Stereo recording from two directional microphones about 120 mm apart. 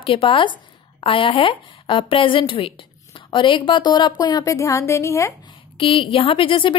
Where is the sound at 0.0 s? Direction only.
50° left (ahead or behind); by 5.3 s 25° left (ahead or behind).